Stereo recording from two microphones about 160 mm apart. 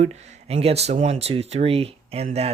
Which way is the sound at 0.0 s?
40° right (ahead or behind).